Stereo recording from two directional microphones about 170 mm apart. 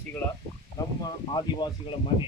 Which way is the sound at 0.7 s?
25° left (ahead or behind).